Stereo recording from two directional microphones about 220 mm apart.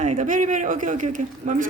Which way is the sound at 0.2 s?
35° right (ahead or behind).